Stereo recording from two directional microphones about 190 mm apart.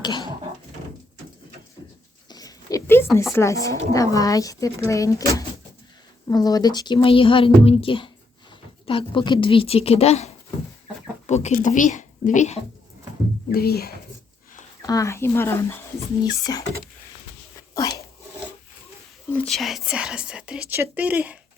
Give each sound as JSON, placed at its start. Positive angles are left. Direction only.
{"t": 0.0, "sound": "a sound", "side_deg": 25}
{"t": 2.3, "sound": "a sound", "side_deg": 20}
{"t": 3.3, "sound": "a woman's voice", "side_deg": 15}
{"t": 13.5, "sound": "speech", "side_deg": 55}
{"t": 14.8, "sound": "a woman's voice", "side_deg": 20}
{"t": 17.7, "sound": "dog", "side_deg": 20}
{"t": 19.3, "sound": "speech", "side_deg": 5}